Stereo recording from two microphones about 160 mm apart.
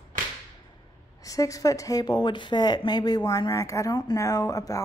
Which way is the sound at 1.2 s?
20° left (ahead or behind).